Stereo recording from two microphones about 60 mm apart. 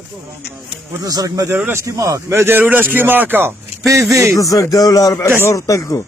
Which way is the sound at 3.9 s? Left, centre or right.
Right.